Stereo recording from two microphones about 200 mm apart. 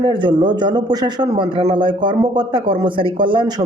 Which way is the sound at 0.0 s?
25° right (ahead or behind).